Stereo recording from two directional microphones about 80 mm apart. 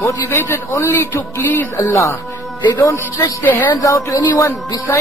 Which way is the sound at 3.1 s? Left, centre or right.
Left.